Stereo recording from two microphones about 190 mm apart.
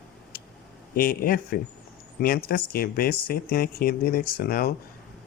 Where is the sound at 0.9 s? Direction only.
50° left (ahead or behind).